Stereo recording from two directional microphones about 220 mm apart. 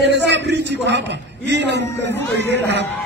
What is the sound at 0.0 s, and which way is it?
A man's voice, 50° right (ahead or behind).